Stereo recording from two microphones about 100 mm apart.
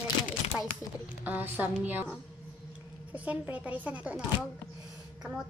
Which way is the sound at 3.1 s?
15° right (ahead or behind).